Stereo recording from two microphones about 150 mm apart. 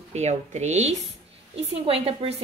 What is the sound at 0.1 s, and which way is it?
Speech, 50° right (ahead or behind).